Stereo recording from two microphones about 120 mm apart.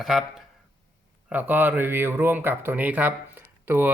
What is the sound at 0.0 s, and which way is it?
Speech, centre (ahead or behind).